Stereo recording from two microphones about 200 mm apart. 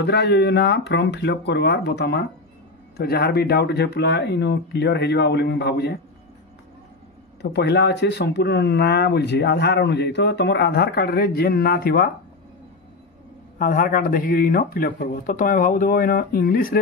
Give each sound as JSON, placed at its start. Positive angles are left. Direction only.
{"t": 0.0, "sound": "speech", "side_deg": 55}
{"t": 7.5, "sound": "speech", "side_deg": 55}
{"t": 13.6, "sound": "speech", "side_deg": 45}